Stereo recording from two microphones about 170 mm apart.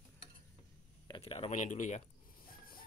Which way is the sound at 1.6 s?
45° left (ahead or behind).